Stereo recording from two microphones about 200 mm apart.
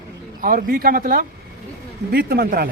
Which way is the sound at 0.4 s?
45° right (ahead or behind).